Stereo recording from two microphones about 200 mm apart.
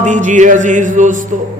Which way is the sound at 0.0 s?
40° right (ahead or behind).